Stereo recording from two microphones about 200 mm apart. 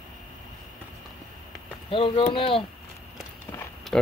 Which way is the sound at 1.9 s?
25° left (ahead or behind).